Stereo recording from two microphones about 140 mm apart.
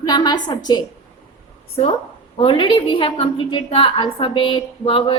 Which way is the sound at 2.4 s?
35° left (ahead or behind).